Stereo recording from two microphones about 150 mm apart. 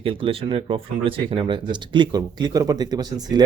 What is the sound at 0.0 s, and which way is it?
Speech, 35° right (ahead or behind).